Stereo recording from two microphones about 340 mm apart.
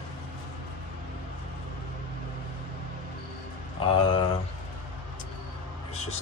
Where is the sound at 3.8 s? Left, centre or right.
Centre.